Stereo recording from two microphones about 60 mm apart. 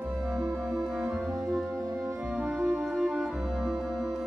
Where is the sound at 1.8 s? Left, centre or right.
Right.